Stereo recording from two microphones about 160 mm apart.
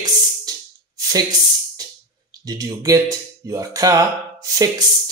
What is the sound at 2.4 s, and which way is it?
Speech, 20° right (ahead or behind).